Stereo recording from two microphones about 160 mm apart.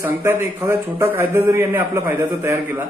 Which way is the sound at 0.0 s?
20° right (ahead or behind).